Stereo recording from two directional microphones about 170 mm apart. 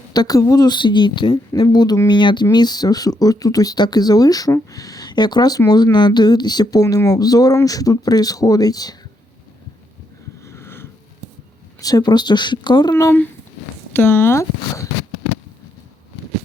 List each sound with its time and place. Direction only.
0.1 s speech: 20° left (ahead or behind)
10.4 s a sound: 15° left (ahead or behind)
11.8 s speech: 20° left (ahead or behind)